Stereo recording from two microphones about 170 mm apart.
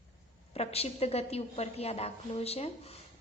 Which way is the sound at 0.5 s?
35° left (ahead or behind).